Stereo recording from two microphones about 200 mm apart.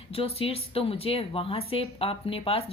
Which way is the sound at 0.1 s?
30° left (ahead or behind).